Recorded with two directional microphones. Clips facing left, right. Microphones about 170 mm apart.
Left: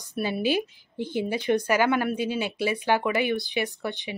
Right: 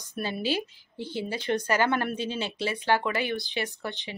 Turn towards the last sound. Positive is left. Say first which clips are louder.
# left 4 dB
turn(degrees=15)  # may be behind; listen again after turning